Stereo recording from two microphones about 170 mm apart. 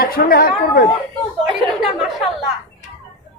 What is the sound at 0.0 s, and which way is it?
Speech, 60° left (ahead or behind).